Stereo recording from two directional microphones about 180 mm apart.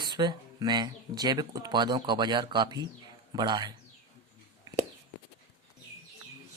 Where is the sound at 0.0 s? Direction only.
25° right (ahead or behind).